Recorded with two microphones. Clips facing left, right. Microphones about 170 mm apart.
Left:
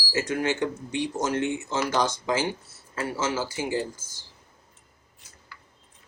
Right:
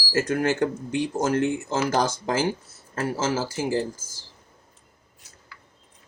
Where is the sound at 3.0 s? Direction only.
40° right (ahead or behind).